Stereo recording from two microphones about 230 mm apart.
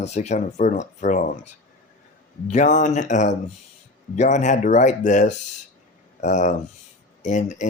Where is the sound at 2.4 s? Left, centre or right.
Left.